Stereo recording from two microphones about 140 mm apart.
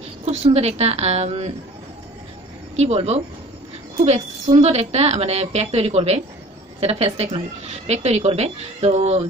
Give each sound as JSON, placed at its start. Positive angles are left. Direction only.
{"t": 0.2, "sound": "a woman's voice", "side_deg": -50}
{"t": 2.7, "sound": "a woman's voice", "side_deg": -50}